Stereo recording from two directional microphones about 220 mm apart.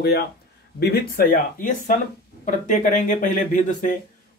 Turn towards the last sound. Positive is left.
turn(degrees=35)  # may be behind; listen again after turning